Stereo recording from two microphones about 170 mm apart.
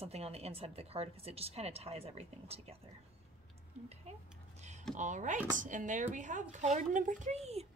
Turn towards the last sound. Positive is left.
turn(degrees=-40)  # may be behind; listen again after turning